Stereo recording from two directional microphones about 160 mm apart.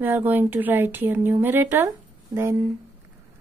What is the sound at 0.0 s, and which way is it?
Speech, 10° right (ahead or behind).